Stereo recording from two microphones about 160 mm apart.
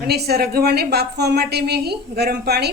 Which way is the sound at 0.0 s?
80° right.